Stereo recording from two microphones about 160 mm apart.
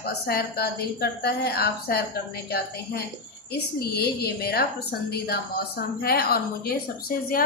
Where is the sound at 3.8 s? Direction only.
80° left.